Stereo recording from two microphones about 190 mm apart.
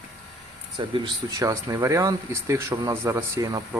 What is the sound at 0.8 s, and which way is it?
Speech, 25° right (ahead or behind).